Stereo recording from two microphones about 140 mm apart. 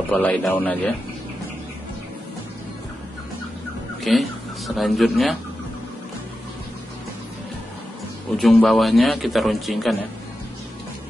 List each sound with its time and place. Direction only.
0.1 s a man's voice: 10° left (ahead or behind)
4.0 s speech: centre (ahead or behind)
8.4 s a man's voice: centre (ahead or behind)